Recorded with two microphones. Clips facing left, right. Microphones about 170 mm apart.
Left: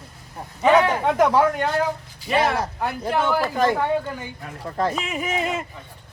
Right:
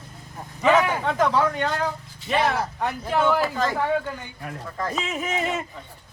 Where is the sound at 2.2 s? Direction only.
Centre (ahead or behind).